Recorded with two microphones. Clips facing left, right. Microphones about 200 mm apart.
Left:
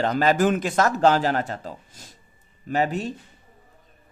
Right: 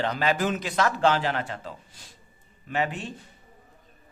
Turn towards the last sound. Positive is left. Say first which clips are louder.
# left 5 dB
turn(degrees=40)  # may be behind; listen again after turning